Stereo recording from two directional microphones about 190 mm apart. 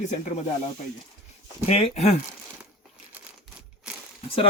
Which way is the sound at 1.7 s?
35° left (ahead or behind).